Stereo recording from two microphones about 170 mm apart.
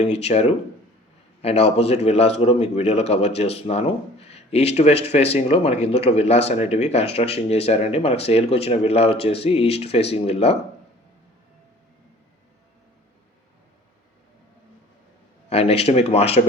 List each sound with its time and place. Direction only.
0.0 s speech: 40° left (ahead or behind)
15.4 s speech: 35° left (ahead or behind)